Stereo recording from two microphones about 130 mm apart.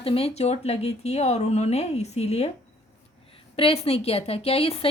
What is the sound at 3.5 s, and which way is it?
A woman's voice, 50° left (ahead or behind).